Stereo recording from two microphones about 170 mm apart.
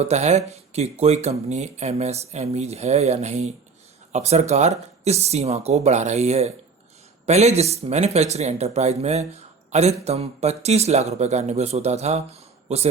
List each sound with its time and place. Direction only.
0.0 s speech: 40° right (ahead or behind)